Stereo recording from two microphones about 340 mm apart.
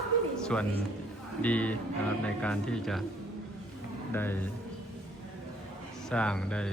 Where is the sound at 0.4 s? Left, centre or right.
Centre.